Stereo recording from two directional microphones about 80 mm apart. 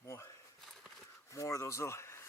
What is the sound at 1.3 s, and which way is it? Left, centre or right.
Speech, left.